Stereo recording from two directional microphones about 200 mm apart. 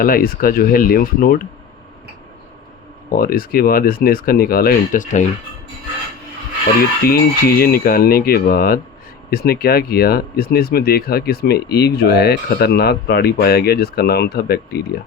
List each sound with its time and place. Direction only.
0.0 s speech: 45° left (ahead or behind)
3.1 s speech: 45° left (ahead or behind)
7.0 s speech: 50° left (ahead or behind)